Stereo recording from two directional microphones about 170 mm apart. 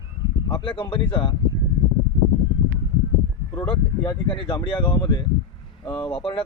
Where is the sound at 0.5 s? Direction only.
30° left (ahead or behind).